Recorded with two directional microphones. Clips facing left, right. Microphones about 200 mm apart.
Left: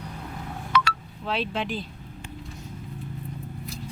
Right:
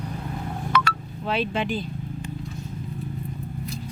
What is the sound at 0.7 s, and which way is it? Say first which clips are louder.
Telephone dialing: even; 50° right (ahead or behind).